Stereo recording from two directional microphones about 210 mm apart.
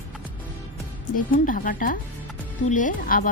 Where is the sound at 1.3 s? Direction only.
40° left (ahead or behind).